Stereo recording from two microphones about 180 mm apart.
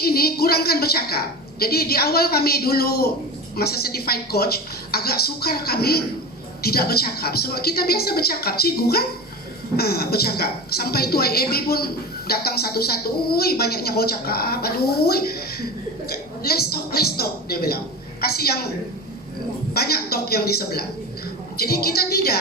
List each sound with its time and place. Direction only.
0.0 s a woman's voice: 60° left (ahead or behind)
19.7 s a woman's voice: 60° left (ahead or behind)